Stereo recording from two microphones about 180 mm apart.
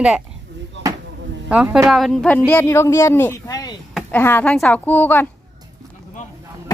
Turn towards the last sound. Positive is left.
turn(degrees=10)  # may be behind; listen again after turning